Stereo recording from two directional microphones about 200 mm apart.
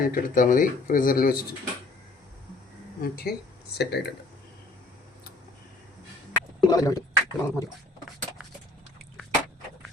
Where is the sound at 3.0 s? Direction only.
50° left (ahead or behind).